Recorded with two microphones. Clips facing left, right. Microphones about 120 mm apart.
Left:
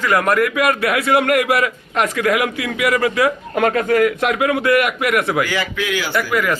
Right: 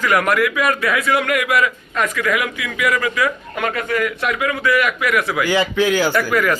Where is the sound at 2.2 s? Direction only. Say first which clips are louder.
Left 4 dB; 75° left (ahead or behind).